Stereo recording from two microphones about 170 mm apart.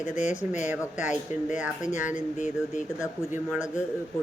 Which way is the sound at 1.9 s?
50° left (ahead or behind).